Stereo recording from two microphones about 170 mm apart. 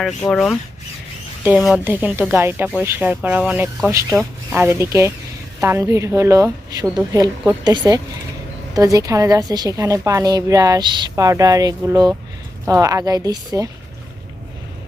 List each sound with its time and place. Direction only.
0.3 s speech: 5° left (ahead or behind)
1.5 s a woman's voice: centre (ahead or behind); by 13.7 s 20° right (ahead or behind)